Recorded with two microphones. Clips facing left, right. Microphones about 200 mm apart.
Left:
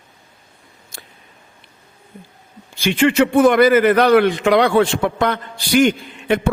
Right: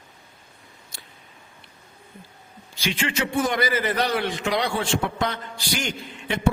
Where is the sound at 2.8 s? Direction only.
55° left (ahead or behind).